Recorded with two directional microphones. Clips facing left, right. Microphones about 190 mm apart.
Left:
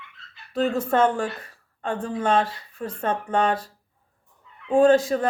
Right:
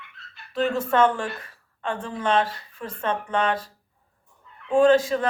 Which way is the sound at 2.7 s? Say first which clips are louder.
Left 1 dB; 45° left (ahead or behind).